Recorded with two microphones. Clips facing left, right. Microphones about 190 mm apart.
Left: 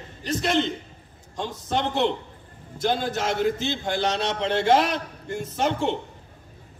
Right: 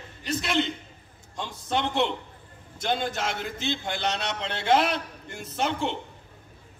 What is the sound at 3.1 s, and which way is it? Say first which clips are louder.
A man's voice: left 8 dB; 45° left (ahead or behind).